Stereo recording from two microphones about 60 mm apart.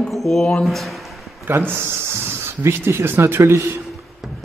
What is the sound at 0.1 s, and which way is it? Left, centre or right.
Speech, centre.